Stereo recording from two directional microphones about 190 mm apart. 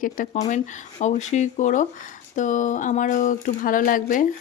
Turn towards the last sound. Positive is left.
turn(degrees=45)  # may be behind; listen again after turning